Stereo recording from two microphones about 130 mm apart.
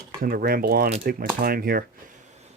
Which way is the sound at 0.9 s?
90° right.